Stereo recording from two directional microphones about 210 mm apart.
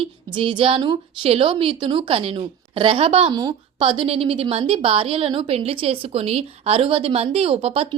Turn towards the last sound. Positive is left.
turn(degrees=-30)  # may be behind; listen again after turning